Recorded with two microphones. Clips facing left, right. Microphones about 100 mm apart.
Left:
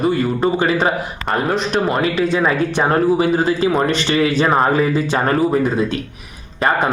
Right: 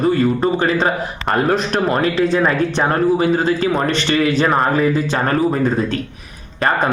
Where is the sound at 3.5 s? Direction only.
20° left (ahead or behind).